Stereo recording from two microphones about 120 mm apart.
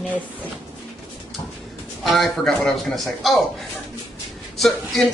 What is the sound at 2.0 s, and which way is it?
Speech, centre (ahead or behind).